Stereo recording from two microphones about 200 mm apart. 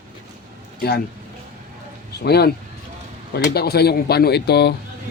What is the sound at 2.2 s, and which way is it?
Speech, 55° left (ahead or behind).